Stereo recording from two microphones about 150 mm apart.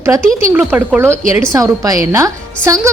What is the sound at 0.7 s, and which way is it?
A woman's voice, 15° right (ahead or behind).